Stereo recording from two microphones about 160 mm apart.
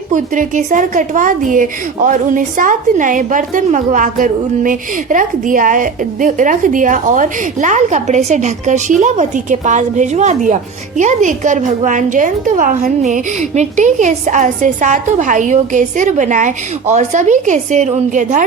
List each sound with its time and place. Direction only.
0.1 s a woman's voice: 55° right (ahead or behind)